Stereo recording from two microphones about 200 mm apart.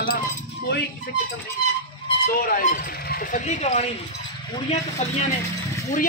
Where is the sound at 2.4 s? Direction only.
40° left (ahead or behind).